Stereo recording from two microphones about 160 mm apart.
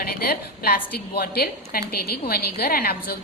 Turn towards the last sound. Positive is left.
turn(degrees=70)  # may be behind; listen again after turning